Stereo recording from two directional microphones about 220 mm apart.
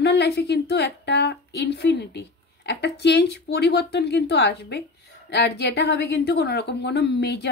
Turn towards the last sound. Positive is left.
turn(degrees=50)  # may be behind; listen again after turning